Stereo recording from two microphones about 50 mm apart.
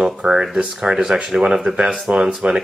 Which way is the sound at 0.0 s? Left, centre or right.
Centre.